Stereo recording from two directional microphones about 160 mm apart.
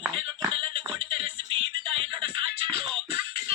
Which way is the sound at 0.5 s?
35° right (ahead or behind).